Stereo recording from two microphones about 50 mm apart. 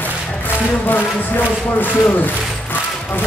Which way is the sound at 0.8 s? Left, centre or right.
Left.